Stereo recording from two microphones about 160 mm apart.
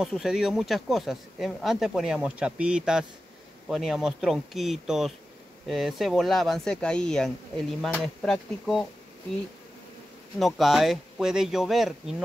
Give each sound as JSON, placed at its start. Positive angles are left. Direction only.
{"t": 0.1, "sound": "speech", "side_deg": 0}
{"t": 10.4, "sound": "speech", "side_deg": 0}